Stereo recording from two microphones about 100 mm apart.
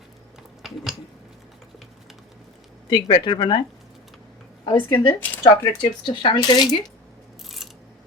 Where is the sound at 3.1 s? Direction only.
50° left (ahead or behind).